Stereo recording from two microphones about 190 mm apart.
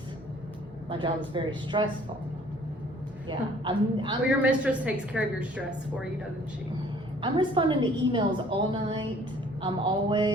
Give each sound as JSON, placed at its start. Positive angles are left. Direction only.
{"t": 0.9, "sound": "a woman's voice", "side_deg": -25}
{"t": 3.2, "sound": "a woman's voice", "side_deg": -25}
{"t": 4.3, "sound": "a woman's voice", "side_deg": -5}
{"t": 7.2, "sound": "a woman's voice", "side_deg": -25}